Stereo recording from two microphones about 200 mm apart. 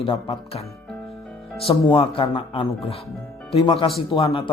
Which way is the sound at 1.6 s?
25° left (ahead or behind).